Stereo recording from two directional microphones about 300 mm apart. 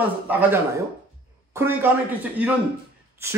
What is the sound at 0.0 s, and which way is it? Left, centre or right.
Speech, centre.